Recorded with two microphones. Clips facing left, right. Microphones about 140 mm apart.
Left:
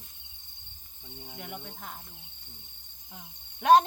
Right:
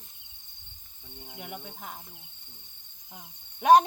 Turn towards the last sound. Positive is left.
turn(degrees=-10)  # may be behind; listen again after turning